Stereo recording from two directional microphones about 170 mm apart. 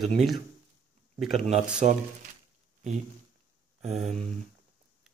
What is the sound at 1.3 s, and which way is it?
Speech, 40° right (ahead or behind).